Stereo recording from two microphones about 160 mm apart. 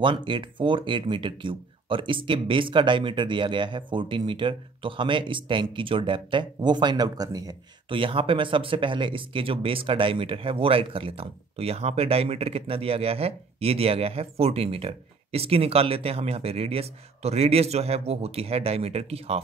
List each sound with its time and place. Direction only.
0.0 s speech: 30° right (ahead or behind)